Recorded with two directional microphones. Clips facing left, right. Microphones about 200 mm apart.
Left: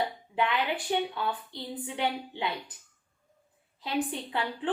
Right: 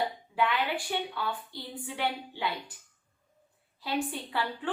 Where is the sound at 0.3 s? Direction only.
20° left (ahead or behind).